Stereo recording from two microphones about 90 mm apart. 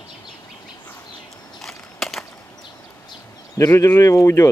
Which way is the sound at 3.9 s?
30° left (ahead or behind).